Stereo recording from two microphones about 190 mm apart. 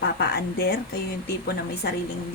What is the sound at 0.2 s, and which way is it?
Speech, 60° left (ahead or behind).